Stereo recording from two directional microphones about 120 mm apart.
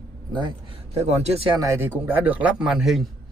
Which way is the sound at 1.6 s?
20° right (ahead or behind).